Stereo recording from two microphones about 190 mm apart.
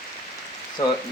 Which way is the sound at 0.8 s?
20° left (ahead or behind).